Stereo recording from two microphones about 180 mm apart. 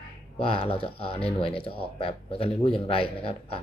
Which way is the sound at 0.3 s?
30° left (ahead or behind).